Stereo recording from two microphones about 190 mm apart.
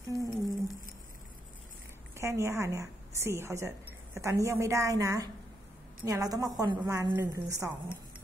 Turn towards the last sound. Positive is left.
turn(degrees=-15)  # may be behind; listen again after turning